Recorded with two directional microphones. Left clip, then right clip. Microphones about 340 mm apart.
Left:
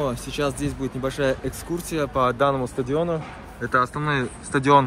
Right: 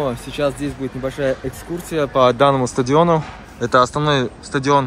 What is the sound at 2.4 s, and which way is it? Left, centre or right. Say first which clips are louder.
Speech: right 7 dB; right.